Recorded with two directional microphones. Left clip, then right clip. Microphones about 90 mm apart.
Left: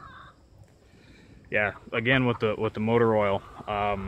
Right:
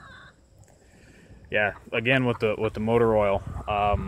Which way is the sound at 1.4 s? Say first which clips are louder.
Right 2 dB; 15° right (ahead or behind).